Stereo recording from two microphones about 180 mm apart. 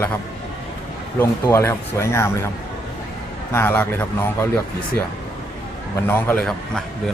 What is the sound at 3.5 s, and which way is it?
Speech, 10° left (ahead or behind).